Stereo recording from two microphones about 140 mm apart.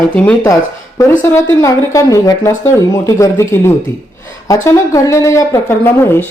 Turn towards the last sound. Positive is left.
turn(degrees=15)  # may be behind; listen again after turning